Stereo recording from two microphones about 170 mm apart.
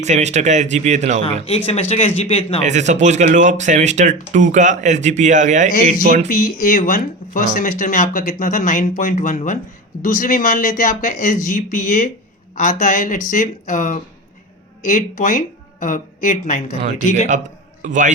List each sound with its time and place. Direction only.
0.0 s speech: 40° right (ahead or behind)
1.2 s speech: 35° left (ahead or behind)
2.6 s speech: 45° right (ahead or behind)
6.2 s speech: 50° left (ahead or behind)
17.8 s speech: 50° right (ahead or behind)